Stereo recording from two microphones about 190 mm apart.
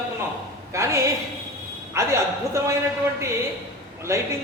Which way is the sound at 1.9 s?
15° right (ahead or behind).